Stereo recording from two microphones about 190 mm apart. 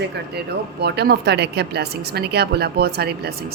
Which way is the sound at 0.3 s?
60° right (ahead or behind).